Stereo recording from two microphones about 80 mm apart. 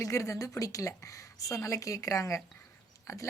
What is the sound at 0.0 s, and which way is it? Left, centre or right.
A woman's voice, left.